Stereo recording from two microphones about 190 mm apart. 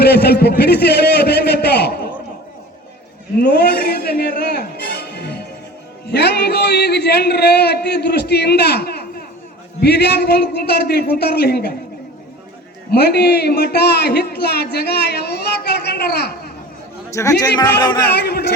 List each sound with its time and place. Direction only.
0.0 s a man's voice: 60° left (ahead or behind)
3.3 s a man's voice: 60° left (ahead or behind)
12.9 s a man's voice: 60° left (ahead or behind)
17.2 s speech: 15° left (ahead or behind)
18.0 s a man's voice: 60° left (ahead or behind)